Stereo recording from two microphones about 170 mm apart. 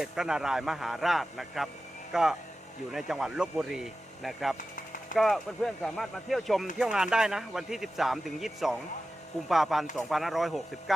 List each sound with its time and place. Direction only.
0.0 s speech: 5° right (ahead or behind)
4.5 s a sound: 50° left (ahead or behind)
5.1 s speech: centre (ahead or behind)